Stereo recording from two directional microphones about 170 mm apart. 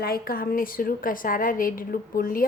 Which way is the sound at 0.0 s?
60° left (ahead or behind).